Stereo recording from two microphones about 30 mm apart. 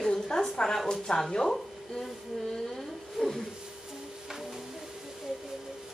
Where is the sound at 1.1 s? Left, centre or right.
Left.